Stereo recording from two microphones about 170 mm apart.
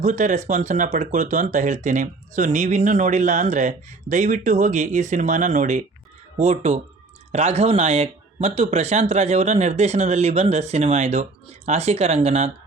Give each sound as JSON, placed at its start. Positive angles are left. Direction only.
{"t": 0.0, "sound": "speech", "side_deg": -45}